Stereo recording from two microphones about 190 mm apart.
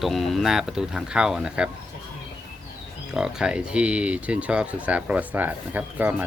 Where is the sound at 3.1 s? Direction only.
5° right (ahead or behind).